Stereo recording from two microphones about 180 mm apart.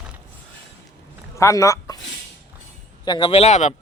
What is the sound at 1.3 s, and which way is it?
Speech, 15° left (ahead or behind).